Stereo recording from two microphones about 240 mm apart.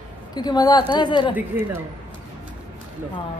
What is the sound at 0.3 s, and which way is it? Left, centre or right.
A woman's voice, centre.